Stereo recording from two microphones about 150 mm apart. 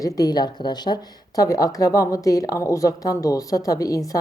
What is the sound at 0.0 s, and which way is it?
Speech, 25° left (ahead or behind).